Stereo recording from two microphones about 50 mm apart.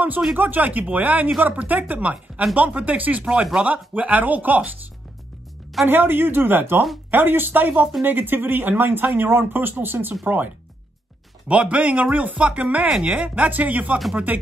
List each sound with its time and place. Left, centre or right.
0.4 s speech: right
5.9 s speech: right
11.4 s speech: right
13.3 s speech: right